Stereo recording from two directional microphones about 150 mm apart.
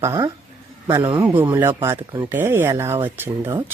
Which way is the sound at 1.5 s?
15° right (ahead or behind).